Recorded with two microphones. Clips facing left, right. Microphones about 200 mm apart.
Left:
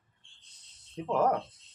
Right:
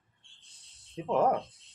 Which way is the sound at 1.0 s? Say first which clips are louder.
Right 1 dB; 10° right (ahead or behind).